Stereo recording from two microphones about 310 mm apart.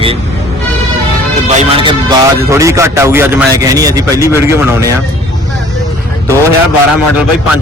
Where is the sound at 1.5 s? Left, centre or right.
Centre.